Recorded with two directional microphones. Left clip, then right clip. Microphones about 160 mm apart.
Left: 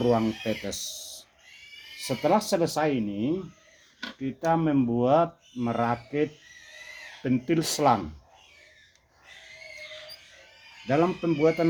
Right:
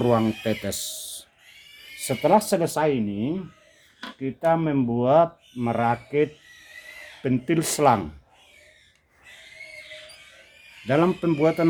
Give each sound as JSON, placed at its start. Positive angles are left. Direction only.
{"t": 0.0, "sound": "speech", "side_deg": -85}
{"t": 2.0, "sound": "speech", "side_deg": -50}
{"t": 4.2, "sound": "speech", "side_deg": -30}
{"t": 10.8, "sound": "speech", "side_deg": -65}